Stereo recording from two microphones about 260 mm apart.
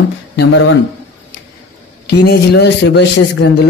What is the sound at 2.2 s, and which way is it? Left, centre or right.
Speech, left.